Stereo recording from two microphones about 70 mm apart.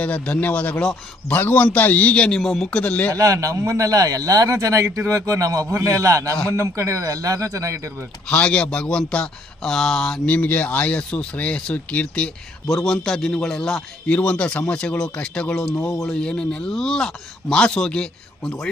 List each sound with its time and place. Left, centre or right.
0.0 s speech: centre
2.6 s speech: centre
3.1 s a man's voice: right
8.3 s speech: centre
10.3 s speech: left
12.6 s speech: centre